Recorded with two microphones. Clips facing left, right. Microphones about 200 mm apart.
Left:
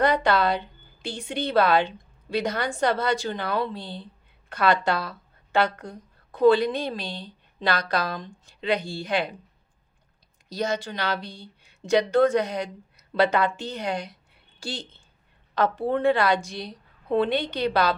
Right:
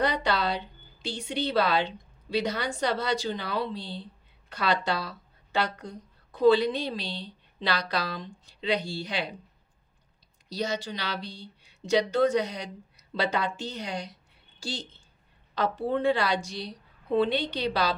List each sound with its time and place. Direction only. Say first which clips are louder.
0.0 s a woman's voice: left 5 dB; 50° left (ahead or behind)
10.5 s a woman's voice: left 3 dB; 50° left (ahead or behind)